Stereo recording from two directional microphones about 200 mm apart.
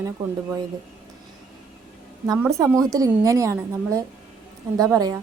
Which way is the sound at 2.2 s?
15° right (ahead or behind).